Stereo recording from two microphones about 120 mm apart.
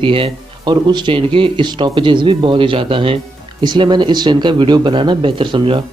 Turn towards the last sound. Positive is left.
turn(degrees=-45)  # may be behind; listen again after turning